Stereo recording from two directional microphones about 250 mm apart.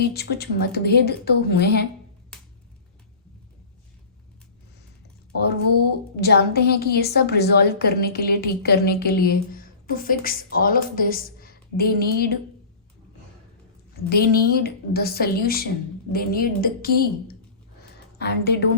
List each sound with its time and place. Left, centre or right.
0.1 s a woman's voice: left
6.1 s a woman's voice: left
14.1 s a woman's voice: left